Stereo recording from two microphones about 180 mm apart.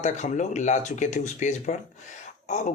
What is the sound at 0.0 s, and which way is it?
Speech, 40° left (ahead or behind).